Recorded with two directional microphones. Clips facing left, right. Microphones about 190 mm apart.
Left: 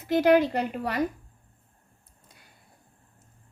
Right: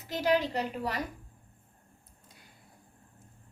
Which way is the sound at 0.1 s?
55° left (ahead or behind).